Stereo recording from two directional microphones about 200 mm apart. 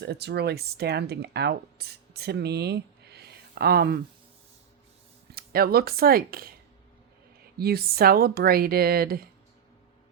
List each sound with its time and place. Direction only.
0.0 s speech: 55° right (ahead or behind)
5.3 s speech: 50° right (ahead or behind)
7.6 s speech: 50° right (ahead or behind)